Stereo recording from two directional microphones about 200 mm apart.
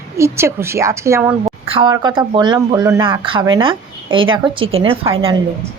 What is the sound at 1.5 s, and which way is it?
Speech, 30° right (ahead or behind).